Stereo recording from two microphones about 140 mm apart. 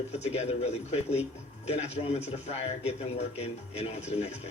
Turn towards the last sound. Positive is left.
turn(degrees=50)  # may be behind; listen again after turning